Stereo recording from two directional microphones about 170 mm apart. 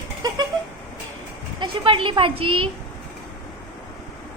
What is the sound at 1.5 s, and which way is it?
Speech, 30° right (ahead or behind).